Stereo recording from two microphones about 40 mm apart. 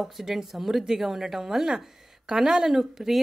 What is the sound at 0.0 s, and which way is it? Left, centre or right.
A woman's voice, centre.